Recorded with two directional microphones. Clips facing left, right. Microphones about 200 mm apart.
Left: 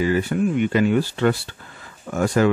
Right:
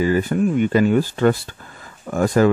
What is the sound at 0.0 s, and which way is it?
Speech, 45° right (ahead or behind).